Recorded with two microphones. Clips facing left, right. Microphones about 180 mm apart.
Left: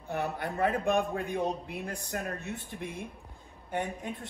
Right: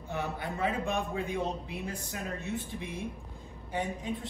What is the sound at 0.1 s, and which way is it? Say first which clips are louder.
Speech: left 2 dB; 60° left (ahead or behind).